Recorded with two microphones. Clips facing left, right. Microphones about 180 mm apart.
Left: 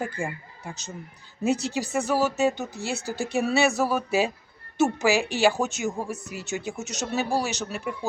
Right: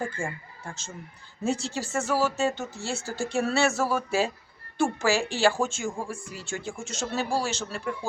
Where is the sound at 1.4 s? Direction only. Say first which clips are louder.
Left 3 dB; 15° left (ahead or behind).